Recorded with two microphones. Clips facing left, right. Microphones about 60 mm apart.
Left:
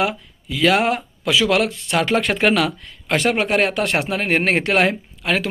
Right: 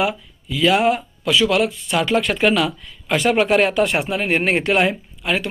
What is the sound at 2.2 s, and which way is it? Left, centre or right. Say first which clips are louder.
Speech: even; left.